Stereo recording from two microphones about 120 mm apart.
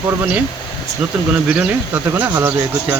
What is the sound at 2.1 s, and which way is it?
Speech, 15° right (ahead or behind).